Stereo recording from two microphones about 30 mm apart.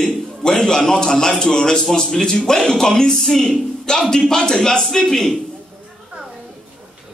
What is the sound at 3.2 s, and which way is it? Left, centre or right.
A woman's voice, centre.